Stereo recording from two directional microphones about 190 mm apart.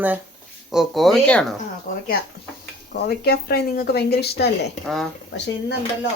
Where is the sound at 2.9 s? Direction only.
55° left (ahead or behind).